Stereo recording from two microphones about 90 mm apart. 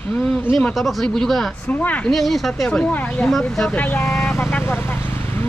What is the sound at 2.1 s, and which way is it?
Speech, centre (ahead or behind).